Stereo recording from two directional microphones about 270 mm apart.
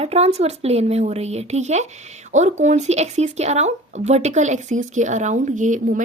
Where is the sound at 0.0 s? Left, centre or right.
Right.